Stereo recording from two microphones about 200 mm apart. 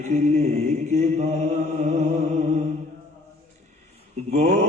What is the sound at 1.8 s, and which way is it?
Music, 35° right (ahead or behind).